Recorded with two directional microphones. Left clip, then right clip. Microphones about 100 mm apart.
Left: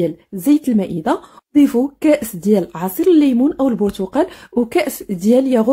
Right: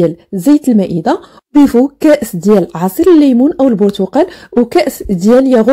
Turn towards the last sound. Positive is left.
turn(degrees=-35)  # may be behind; listen again after turning